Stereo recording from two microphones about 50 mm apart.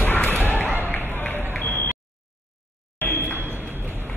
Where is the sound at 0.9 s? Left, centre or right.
Left.